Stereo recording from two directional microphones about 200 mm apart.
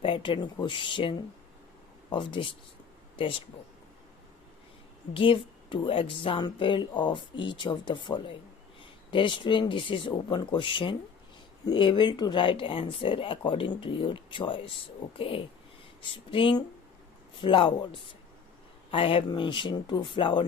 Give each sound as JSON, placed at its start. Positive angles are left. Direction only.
{"t": 0.0, "sound": "speech", "side_deg": 25}
{"t": 5.1, "sound": "speech", "side_deg": 25}